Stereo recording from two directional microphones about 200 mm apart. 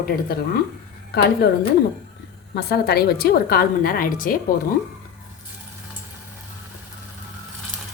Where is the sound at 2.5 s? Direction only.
55° left (ahead or behind).